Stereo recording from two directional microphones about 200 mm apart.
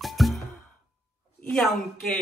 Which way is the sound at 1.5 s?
5° left (ahead or behind).